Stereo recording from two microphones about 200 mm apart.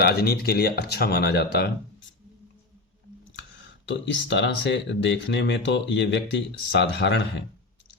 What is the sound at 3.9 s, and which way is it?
Speech, 65° left (ahead or behind).